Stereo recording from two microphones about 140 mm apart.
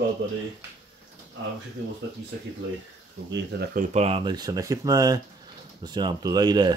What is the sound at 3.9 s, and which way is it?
Speech, 45° right (ahead or behind).